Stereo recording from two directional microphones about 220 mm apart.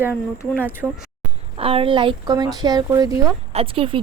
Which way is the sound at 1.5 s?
25° right (ahead or behind).